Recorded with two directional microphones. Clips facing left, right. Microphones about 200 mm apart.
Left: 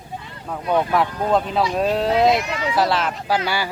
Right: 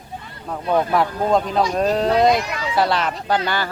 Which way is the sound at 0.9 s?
Centre (ahead or behind).